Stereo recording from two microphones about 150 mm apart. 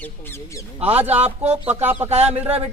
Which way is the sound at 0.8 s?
10° right (ahead or behind).